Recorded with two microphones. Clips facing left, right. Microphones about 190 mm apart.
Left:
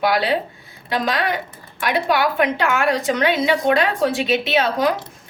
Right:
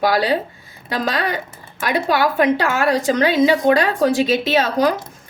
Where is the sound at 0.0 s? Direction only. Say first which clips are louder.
Right 2 dB; 40° right (ahead or behind).